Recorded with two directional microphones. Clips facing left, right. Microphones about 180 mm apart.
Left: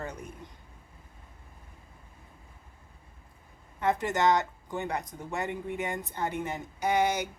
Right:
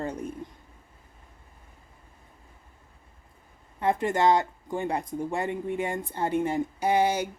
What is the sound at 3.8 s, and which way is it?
Speech, 25° right (ahead or behind).